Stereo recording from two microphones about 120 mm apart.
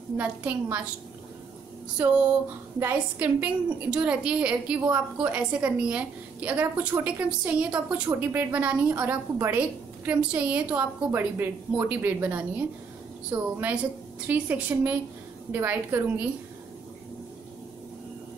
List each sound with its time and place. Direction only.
0.2 s a woman's voice: 10° right (ahead or behind)
2.0 s a woman's voice: 15° right (ahead or behind)